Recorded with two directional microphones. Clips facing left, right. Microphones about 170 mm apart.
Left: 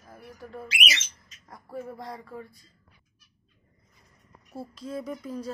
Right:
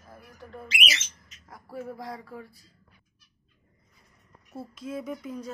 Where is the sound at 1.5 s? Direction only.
Centre (ahead or behind).